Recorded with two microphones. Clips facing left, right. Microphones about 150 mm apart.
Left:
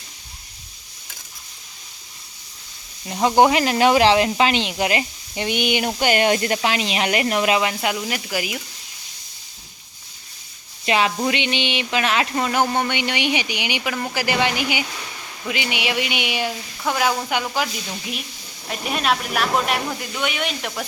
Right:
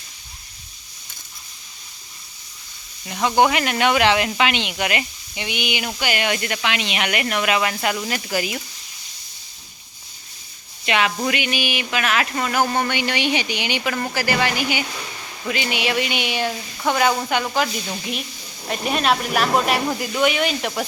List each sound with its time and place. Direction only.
3.1 s speech: 30° left (ahead or behind)
7.7 s speech: 15° left (ahead or behind)
10.8 s speech: 30° left (ahead or behind); by 17.7 s 5° left (ahead or behind)
18.7 s speech: centre (ahead or behind)